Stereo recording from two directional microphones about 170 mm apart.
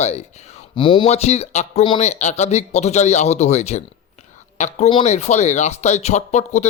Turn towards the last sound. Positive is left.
turn(degrees=40)  # may be behind; listen again after turning